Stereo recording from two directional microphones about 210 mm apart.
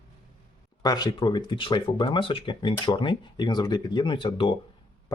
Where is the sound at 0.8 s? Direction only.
20° left (ahead or behind).